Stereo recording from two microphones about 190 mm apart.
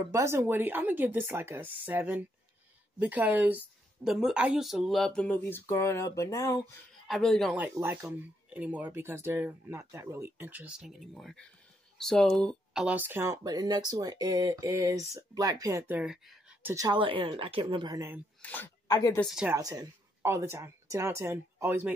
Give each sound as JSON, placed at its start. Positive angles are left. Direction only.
{"t": 0.1, "sound": "a woman's voice", "side_deg": -15}
{"t": 7.1, "sound": "speech", "side_deg": 0}
{"t": 12.8, "sound": "speech", "side_deg": -10}
{"t": 16.7, "sound": "speech", "side_deg": -20}
{"t": 18.4, "sound": "speech", "side_deg": 10}
{"t": 18.9, "sound": "a woman's voice", "side_deg": 20}
{"t": 19.1, "sound": "a woman's voice", "side_deg": 0}
{"t": 19.5, "sound": "speech", "side_deg": -20}